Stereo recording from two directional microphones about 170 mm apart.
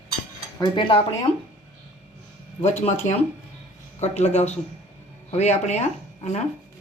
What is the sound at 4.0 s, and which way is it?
Speech, 40° left (ahead or behind).